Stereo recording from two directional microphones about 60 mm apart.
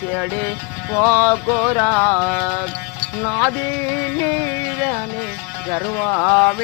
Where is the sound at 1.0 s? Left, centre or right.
Left.